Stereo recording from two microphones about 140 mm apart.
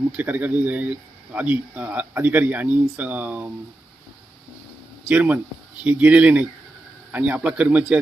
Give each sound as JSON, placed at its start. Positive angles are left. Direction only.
{"t": 0.1, "sound": "speech", "side_deg": -10}
{"t": 5.0, "sound": "speech", "side_deg": -10}